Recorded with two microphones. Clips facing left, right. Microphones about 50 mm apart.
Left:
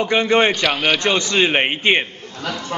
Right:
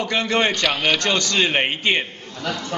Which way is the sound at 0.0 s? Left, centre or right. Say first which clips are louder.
Left 5 dB; left.